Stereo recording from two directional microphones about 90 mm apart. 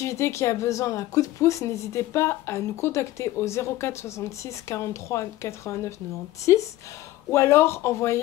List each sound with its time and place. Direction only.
0.0 s a woman's voice: 30° left (ahead or behind)